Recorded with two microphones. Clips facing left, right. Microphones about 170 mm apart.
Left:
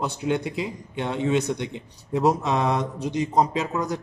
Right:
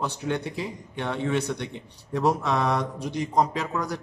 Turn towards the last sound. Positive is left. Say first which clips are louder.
# left 3 dB
turn(degrees=20)  # may be behind; listen again after turning